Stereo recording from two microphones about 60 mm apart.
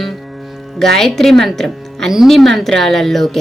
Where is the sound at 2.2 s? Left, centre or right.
Centre.